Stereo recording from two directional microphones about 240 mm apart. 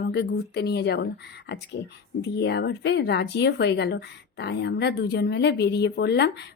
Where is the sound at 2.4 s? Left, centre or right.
Left.